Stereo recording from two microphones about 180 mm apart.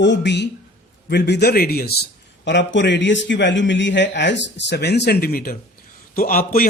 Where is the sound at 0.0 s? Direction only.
75° left (ahead or behind); by 2.0 s 60° left (ahead or behind).